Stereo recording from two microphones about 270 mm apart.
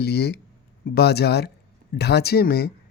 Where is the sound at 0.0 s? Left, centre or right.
Left.